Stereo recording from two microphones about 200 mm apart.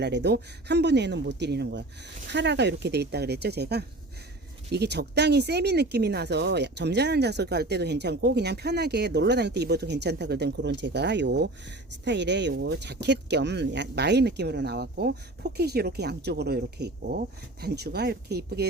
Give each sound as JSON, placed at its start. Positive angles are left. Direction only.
{"t": 0.0, "sound": "speech", "side_deg": -60}